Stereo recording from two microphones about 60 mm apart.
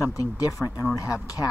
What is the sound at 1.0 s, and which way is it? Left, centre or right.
Speech, left.